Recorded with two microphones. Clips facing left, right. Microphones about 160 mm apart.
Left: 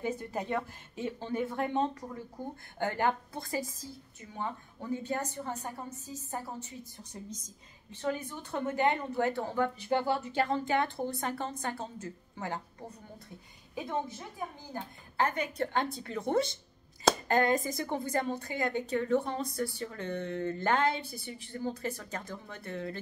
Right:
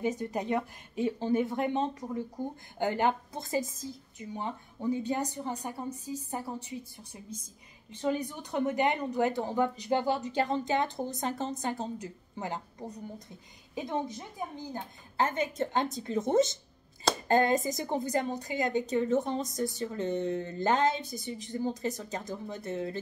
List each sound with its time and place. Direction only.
0.2 s a woman's voice: 15° right (ahead or behind)